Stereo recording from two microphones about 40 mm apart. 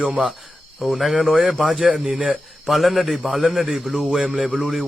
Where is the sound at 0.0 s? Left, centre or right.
Centre.